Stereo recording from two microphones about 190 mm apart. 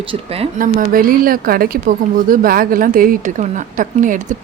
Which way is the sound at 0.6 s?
45° right (ahead or behind).